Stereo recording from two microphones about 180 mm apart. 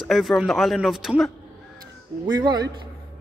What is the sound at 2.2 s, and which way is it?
Speech, 25° right (ahead or behind).